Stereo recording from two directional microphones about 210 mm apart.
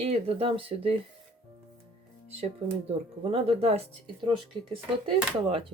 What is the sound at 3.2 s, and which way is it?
Speech, 30° right (ahead or behind).